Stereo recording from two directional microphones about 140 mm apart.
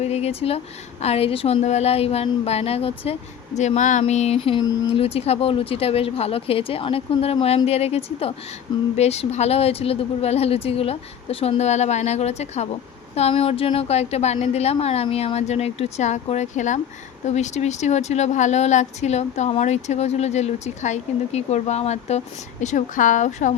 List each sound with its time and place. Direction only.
0.0 s a woman's voice: 50° left (ahead or behind)
4.6 s speech: 25° left (ahead or behind)
4.9 s a woman's voice: 45° left (ahead or behind)
22.6 s a woman's voice: 60° left (ahead or behind)